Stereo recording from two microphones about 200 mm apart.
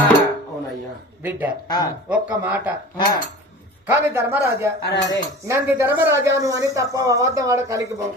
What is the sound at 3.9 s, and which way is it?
Speech, 10° right (ahead or behind).